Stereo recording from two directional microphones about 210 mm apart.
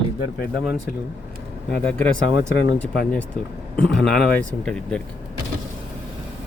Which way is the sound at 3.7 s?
5° left (ahead or behind).